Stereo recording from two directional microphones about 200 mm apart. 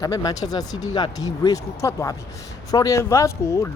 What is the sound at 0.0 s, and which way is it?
Speech, 20° left (ahead or behind).